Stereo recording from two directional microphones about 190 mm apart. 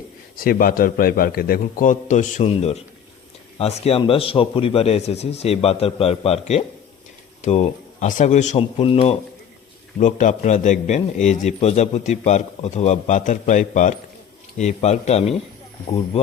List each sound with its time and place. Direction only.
0.3 s a man's voice: 50° left (ahead or behind); by 9.1 s 30° left (ahead or behind)
10.0 s a man's voice: 40° left (ahead or behind)